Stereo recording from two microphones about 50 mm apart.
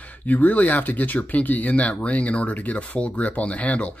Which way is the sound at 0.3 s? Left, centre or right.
Left.